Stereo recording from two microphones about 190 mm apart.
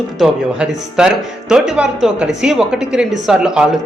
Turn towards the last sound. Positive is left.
turn(degrees=-5)  # may be behind; listen again after turning